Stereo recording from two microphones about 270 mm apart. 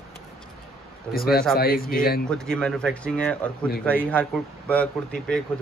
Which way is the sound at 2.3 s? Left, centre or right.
Centre.